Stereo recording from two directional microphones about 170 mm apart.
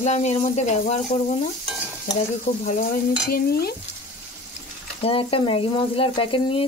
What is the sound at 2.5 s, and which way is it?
Speech, 50° left (ahead or behind).